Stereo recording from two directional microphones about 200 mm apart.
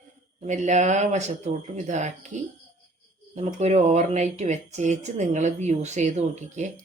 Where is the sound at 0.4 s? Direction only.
35° right (ahead or behind).